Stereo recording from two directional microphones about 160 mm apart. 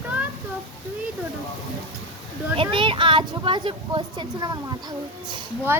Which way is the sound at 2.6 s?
30° right (ahead or behind).